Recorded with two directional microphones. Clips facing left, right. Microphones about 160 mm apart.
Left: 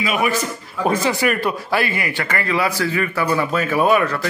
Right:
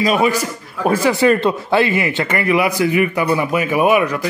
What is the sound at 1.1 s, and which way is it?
A man's voice, 25° right (ahead or behind).